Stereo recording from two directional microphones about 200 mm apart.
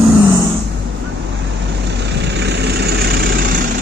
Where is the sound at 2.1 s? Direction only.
60° right (ahead or behind).